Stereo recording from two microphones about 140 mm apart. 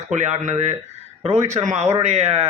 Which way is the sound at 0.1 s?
60° right (ahead or behind).